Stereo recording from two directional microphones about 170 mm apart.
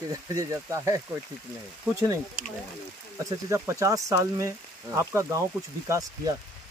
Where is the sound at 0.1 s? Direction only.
20° right (ahead or behind).